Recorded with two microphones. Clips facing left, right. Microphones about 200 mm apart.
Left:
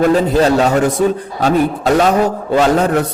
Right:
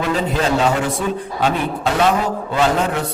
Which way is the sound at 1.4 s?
40° left (ahead or behind).